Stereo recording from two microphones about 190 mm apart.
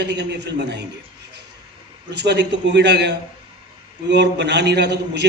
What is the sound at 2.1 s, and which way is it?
A man's voice, 65° right (ahead or behind).